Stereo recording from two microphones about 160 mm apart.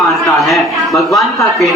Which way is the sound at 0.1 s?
Centre (ahead or behind).